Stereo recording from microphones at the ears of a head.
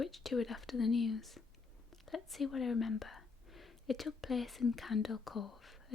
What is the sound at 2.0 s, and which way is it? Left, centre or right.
Speech, left.